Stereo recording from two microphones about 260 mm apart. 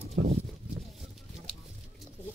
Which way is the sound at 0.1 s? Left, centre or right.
Right.